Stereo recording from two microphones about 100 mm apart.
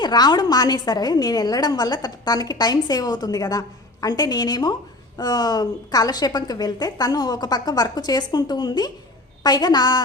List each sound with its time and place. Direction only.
0.0 s a woman's voice: 45° left (ahead or behind)